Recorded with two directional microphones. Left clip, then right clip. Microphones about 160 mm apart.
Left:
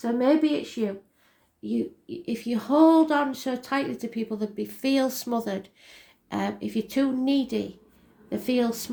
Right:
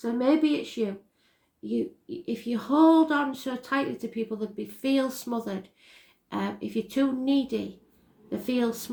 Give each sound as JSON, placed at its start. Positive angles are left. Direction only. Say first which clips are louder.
{"t": 0.0, "sound": "speech", "louder": "left 2 dB", "side_deg": 35}